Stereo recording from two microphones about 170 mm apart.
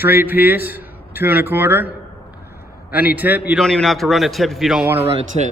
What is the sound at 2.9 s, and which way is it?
Speech, 10° right (ahead or behind).